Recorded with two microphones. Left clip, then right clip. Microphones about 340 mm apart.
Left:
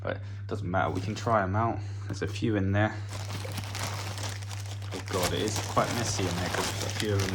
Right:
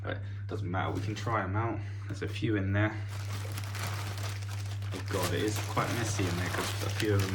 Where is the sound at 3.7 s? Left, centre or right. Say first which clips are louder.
Left 3 dB; left.